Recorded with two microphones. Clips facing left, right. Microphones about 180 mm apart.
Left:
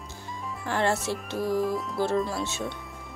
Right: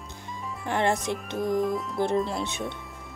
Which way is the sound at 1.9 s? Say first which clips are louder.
Right 1 dB; 20° right (ahead or behind).